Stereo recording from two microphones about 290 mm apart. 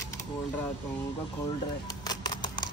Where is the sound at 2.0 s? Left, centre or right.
Centre.